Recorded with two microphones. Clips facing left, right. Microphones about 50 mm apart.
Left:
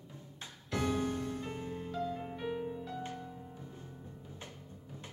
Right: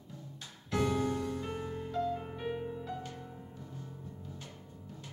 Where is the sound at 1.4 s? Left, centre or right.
Right.